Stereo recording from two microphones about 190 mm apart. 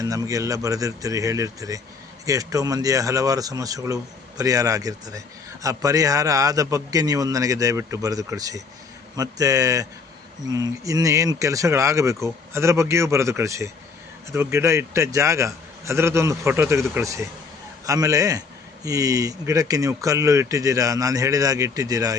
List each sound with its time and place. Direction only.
0.0 s a man's voice: 15° right (ahead or behind)